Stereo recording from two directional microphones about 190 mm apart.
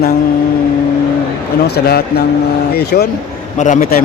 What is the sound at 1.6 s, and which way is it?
A man's voice, 55° left (ahead or behind).